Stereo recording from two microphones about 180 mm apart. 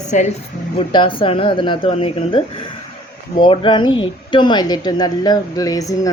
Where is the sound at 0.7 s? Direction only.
25° left (ahead or behind).